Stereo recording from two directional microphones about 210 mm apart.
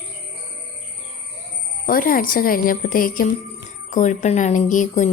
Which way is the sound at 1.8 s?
45° left (ahead or behind).